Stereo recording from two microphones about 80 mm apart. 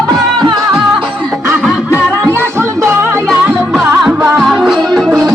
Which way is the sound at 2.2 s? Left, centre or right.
Right.